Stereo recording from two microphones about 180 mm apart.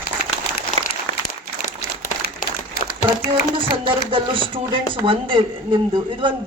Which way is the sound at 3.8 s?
30° right (ahead or behind).